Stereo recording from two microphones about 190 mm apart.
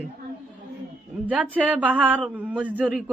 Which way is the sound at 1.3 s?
10° right (ahead or behind).